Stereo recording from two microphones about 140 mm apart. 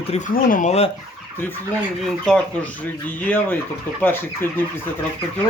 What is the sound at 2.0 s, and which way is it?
Speech, 5° left (ahead or behind).